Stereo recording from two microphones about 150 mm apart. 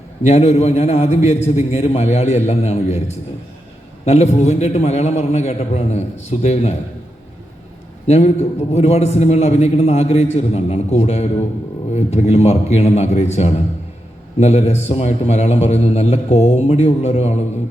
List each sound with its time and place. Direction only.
0.2 s a man's voice: 45° left (ahead or behind)
4.0 s a man's voice: 45° left (ahead or behind)
8.0 s a man's voice: 45° left (ahead or behind)